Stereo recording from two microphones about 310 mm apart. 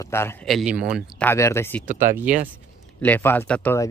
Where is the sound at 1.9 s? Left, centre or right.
Right.